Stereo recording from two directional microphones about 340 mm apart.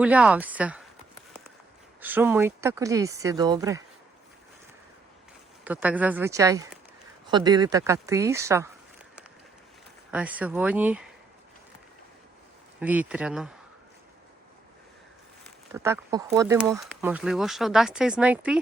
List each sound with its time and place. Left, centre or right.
0.0 s speech: centre
2.0 s speech: centre
5.6 s speech: centre
10.1 s speech: centre
12.8 s speech: centre
15.7 s speech: centre